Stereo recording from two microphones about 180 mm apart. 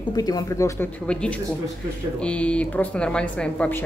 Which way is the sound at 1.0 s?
5° left (ahead or behind).